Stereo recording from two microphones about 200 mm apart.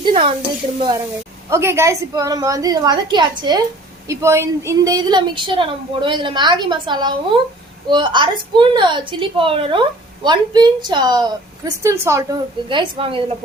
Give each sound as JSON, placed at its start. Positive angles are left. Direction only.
{"t": 0.0, "sound": "speech", "side_deg": -25}
{"t": 1.5, "sound": "a woman's voice", "side_deg": -15}